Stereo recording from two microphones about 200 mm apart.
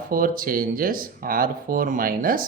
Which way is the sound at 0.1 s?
45° right (ahead or behind).